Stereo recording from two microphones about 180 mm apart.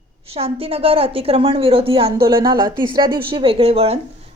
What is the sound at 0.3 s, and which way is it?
A woman's voice, 35° right (ahead or behind).